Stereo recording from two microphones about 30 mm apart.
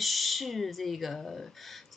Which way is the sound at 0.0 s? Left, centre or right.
Centre.